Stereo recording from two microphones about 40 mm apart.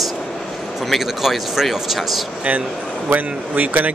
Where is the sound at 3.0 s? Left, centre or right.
Right.